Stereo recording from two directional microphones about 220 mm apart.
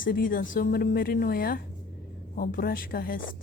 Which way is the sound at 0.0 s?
40° left (ahead or behind).